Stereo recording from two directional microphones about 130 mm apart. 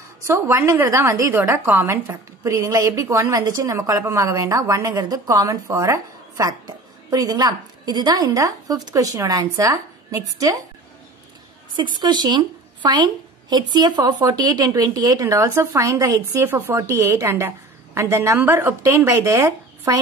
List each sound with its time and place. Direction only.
0.3 s a woman's voice: 20° right (ahead or behind)
12.0 s a woman's voice: 35° right (ahead or behind)